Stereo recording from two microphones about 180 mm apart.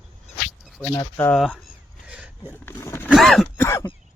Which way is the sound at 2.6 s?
15° left (ahead or behind).